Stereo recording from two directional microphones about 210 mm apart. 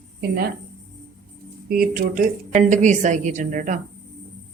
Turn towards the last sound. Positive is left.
turn(degrees=-40)  # may be behind; listen again after turning